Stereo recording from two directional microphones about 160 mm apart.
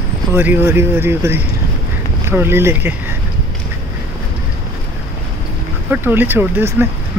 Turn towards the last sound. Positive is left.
turn(degrees=-15)  # may be behind; listen again after turning